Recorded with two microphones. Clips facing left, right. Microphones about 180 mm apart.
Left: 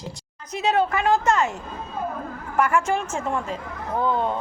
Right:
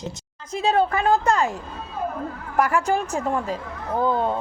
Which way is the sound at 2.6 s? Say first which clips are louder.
Right 1 dB; 35° right (ahead or behind).